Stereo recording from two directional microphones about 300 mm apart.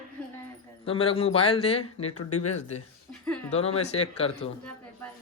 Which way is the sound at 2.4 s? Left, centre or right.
Left.